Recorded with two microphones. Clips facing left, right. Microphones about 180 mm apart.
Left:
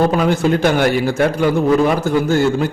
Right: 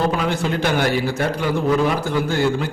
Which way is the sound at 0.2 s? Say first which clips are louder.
Left 6 dB; 45° left (ahead or behind).